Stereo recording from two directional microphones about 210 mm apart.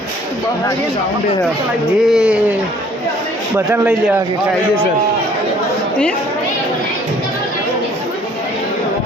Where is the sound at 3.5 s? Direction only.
10° right (ahead or behind).